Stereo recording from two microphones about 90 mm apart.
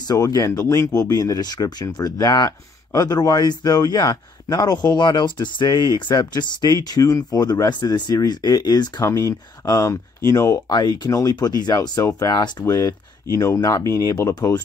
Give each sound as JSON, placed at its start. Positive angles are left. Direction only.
{"t": 0.1, "sound": "speech", "side_deg": 40}
{"t": 6.7, "sound": "speech", "side_deg": 45}
{"t": 9.0, "sound": "speech", "side_deg": 35}
{"t": 10.7, "sound": "speech", "side_deg": 50}
{"t": 12.6, "sound": "speech", "side_deg": 35}